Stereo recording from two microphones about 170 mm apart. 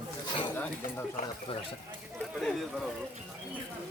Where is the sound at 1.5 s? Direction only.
35° left (ahead or behind).